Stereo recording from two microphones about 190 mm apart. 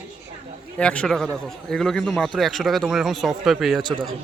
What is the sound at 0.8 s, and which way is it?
A man's voice, 5° left (ahead or behind).